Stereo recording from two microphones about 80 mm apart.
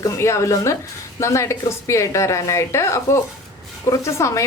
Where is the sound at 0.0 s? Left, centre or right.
Left.